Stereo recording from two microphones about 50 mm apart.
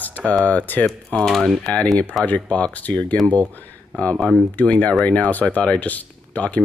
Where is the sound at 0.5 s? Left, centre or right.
Left.